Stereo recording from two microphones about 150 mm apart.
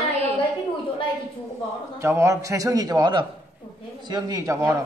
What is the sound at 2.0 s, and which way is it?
A man's voice, 20° right (ahead or behind).